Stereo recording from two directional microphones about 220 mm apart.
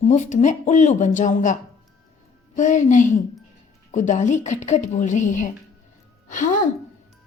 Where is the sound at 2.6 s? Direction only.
35° left (ahead or behind).